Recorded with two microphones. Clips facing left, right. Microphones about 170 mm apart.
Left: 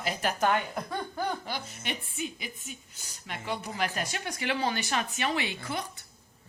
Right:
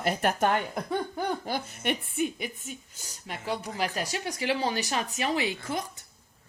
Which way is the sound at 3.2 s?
40° right (ahead or behind).